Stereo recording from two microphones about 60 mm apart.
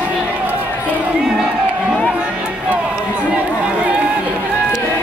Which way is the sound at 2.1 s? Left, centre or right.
Centre.